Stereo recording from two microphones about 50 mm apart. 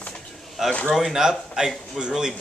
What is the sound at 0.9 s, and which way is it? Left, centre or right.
Speech, centre.